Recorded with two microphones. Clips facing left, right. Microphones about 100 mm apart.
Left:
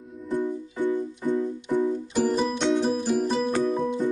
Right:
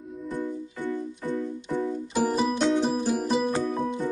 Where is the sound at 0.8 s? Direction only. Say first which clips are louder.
Left 5 dB; 15° left (ahead or behind).